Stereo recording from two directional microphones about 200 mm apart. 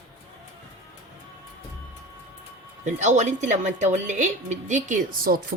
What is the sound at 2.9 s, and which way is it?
A woman's voice, 35° right (ahead or behind).